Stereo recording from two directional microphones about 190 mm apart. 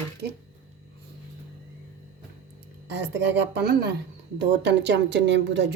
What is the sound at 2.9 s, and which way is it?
A woman's voice, 65° right (ahead or behind).